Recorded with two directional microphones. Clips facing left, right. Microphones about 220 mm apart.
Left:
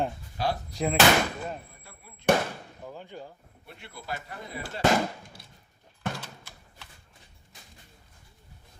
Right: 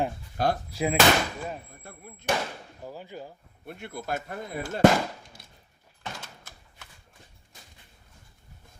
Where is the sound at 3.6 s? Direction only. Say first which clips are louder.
Right 5 dB; 50° right (ahead or behind).